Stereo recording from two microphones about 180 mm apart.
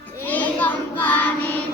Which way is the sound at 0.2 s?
10° left (ahead or behind).